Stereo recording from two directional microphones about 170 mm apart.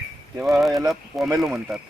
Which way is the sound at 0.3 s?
5° right (ahead or behind).